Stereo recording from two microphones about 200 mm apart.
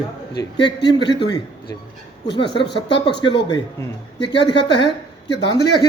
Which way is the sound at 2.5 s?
55° left (ahead or behind).